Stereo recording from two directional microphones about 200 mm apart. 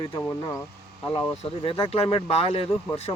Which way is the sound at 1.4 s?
25° left (ahead or behind).